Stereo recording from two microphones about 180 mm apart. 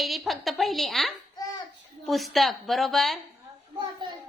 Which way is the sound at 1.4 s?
20° left (ahead or behind).